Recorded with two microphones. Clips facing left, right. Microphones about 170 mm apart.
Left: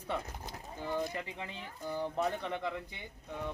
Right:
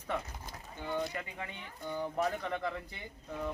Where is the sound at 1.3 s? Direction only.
30° left (ahead or behind).